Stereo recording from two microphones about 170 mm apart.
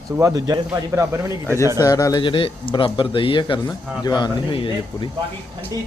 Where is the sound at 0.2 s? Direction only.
20° right (ahead or behind).